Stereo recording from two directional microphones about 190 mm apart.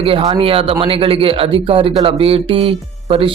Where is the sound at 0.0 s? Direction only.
30° right (ahead or behind).